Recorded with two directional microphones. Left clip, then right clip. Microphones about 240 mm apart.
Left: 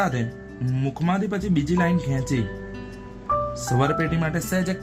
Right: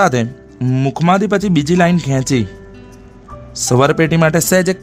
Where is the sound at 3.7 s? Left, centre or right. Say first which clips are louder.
Right 13 dB; right.